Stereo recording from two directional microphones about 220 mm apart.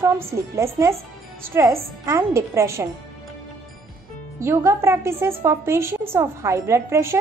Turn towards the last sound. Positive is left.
turn(degrees=-10)  # may be behind; listen again after turning